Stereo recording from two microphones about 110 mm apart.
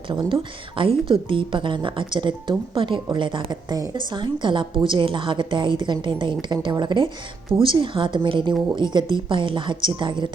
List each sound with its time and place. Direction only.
0.3 s a woman's voice: 55° right (ahead or behind)